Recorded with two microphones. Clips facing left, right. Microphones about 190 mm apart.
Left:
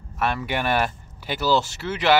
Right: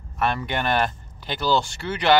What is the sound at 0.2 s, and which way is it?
Speech, 5° left (ahead or behind).